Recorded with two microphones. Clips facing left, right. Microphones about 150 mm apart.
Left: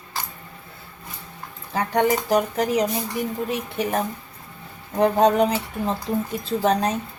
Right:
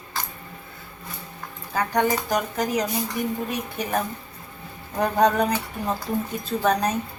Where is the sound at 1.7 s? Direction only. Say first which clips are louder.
Left 2 dB; 25° left (ahead or behind).